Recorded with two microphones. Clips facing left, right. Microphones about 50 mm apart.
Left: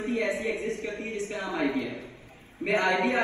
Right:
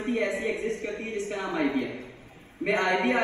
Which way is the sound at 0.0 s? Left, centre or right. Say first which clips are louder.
Right 1 dB; right.